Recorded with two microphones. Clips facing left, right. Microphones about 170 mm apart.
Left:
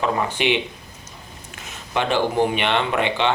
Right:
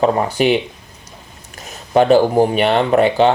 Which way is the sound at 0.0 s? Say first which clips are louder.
Right 7 dB; 40° right (ahead or behind).